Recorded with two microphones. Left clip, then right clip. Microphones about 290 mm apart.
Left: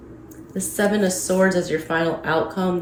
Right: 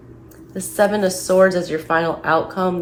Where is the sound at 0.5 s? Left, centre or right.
Centre.